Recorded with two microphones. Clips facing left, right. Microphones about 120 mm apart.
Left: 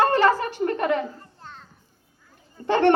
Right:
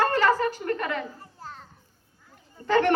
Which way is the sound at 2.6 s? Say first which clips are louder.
Left 3 dB; 25° left (ahead or behind).